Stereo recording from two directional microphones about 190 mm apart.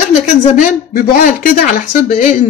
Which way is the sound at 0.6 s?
50° left (ahead or behind).